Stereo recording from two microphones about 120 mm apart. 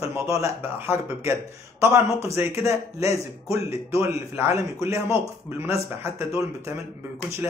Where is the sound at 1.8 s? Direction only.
25° right (ahead or behind).